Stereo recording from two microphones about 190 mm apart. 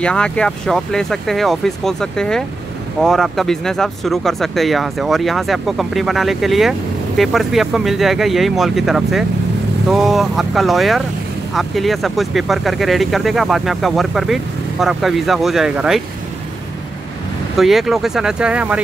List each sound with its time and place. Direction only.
0.0 s speech: 5° left (ahead or behind)
17.6 s speech: centre (ahead or behind)